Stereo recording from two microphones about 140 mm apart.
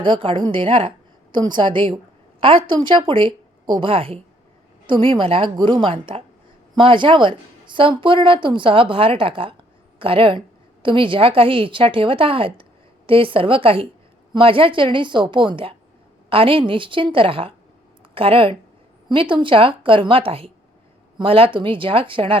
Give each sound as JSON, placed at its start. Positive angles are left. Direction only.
{"t": 0.0, "sound": "a woman's voice", "side_deg": -35}